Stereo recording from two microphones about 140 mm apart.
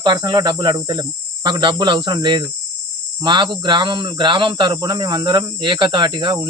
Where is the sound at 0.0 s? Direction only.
30° right (ahead or behind).